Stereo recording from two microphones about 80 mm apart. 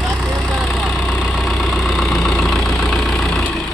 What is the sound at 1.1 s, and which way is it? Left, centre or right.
Vehicle, centre.